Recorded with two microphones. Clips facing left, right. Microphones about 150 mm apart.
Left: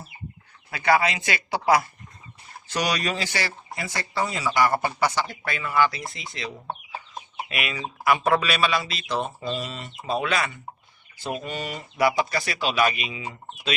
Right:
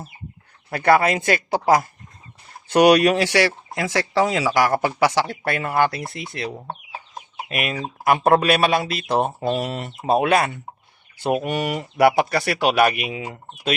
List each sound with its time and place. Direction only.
0.7 s speech: 55° right (ahead or behind)
2.6 s speech: 60° right (ahead or behind)
7.4 s speech: 45° right (ahead or behind)